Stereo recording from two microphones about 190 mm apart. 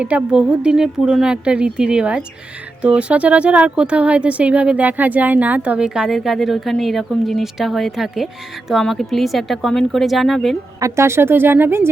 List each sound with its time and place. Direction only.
0.0 s a woman's voice: 5° right (ahead or behind)
10.8 s speech: 15° right (ahead or behind)